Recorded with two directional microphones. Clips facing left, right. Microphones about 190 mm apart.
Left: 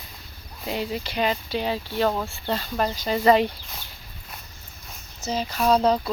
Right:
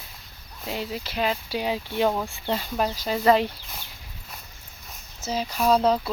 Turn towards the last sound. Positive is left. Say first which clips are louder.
# left 1 dB
turn(degrees=-5)  # may be behind; listen again after turning